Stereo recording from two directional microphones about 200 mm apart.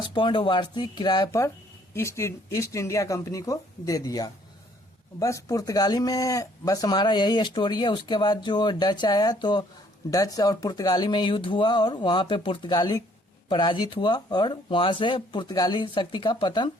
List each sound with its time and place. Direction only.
0.0 s speech: 25° left (ahead or behind)